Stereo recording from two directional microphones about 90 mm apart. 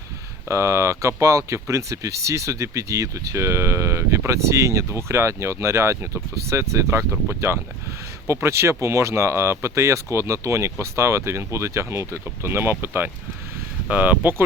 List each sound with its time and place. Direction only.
0.4 s speech: 35° right (ahead or behind)